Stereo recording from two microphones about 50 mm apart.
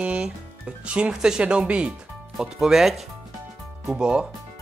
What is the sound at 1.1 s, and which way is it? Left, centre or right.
Speech, centre.